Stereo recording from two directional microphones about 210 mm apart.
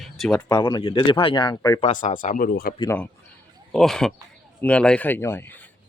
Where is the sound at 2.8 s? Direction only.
10° left (ahead or behind).